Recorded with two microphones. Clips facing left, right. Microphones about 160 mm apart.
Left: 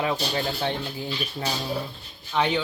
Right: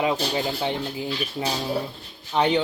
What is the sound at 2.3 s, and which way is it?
Speech, 30° right (ahead or behind).